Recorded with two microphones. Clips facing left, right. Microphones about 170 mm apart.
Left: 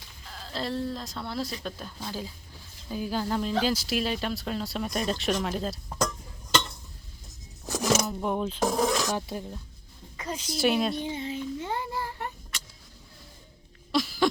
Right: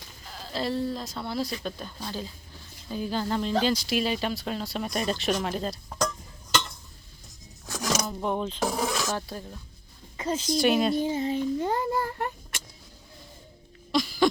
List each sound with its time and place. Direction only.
0.3 s speech: 5° right (ahead or behind)
7.7 s a sound: 5° left (ahead or behind)
8.7 s speech: 5° right (ahead or behind)
9.0 s speech: 15° left (ahead or behind)
10.2 s a woman's voice: 30° right (ahead or behind)
10.4 s speech: 5° left (ahead or behind)
10.9 s speech: 40° right (ahead or behind)
13.9 s throat clearing: centre (ahead or behind)